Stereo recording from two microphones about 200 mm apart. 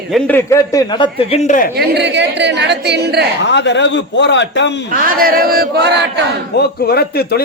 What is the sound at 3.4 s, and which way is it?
A man's voice, 60° left (ahead or behind).